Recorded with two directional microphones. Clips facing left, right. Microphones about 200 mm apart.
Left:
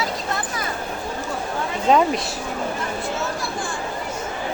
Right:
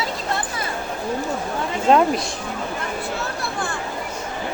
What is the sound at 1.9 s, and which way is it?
Speech, centre (ahead or behind).